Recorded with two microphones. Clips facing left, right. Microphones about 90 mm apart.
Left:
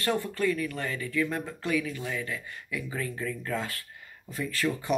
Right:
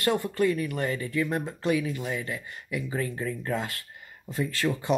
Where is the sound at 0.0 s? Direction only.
20° right (ahead or behind).